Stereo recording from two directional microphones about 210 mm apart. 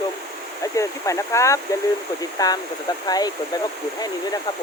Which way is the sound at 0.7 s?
15° left (ahead or behind).